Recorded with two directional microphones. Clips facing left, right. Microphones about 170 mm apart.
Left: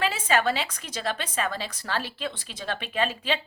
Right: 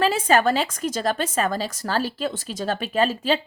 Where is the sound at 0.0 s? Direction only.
40° right (ahead or behind).